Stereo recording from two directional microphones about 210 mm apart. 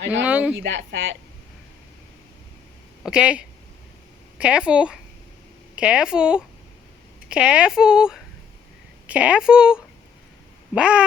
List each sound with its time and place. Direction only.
0.3 s speech: 5° right (ahead or behind)
0.5 s speech: 60° right (ahead or behind)
3.0 s speech: 5° right (ahead or behind)